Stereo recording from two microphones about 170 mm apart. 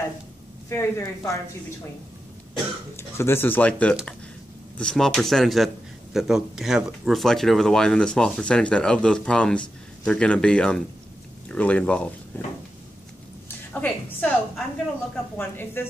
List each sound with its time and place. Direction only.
0.7 s speech: 15° left (ahead or behind)
3.0 s speech: 15° left (ahead or behind)
13.7 s speech: 10° left (ahead or behind)